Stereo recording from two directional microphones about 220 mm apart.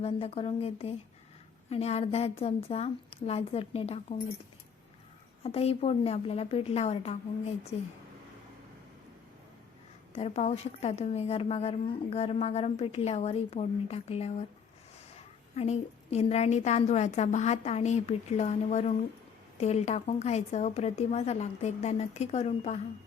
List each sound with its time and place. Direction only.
0.0 s a woman's voice: 25° left (ahead or behind)
5.4 s a woman's voice: 25° left (ahead or behind)
10.2 s a woman's voice: 30° left (ahead or behind)